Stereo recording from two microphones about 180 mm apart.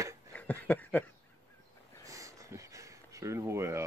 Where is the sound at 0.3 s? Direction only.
10° left (ahead or behind).